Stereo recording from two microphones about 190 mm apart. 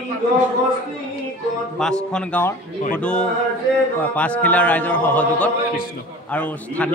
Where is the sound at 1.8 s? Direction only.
5° left (ahead or behind).